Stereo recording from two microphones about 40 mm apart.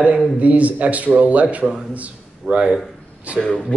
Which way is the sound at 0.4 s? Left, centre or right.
Right.